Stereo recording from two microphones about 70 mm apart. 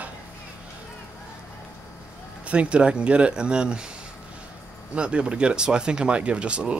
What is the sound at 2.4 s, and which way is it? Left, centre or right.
Speech, centre.